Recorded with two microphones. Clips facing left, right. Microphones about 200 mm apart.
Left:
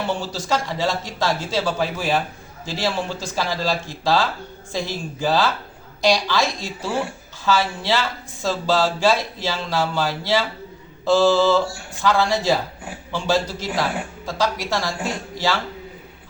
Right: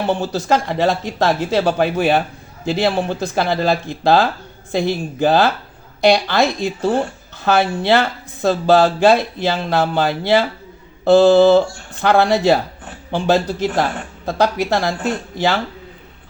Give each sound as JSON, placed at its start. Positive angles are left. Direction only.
{"t": 0.1, "sound": "speech", "side_deg": -60}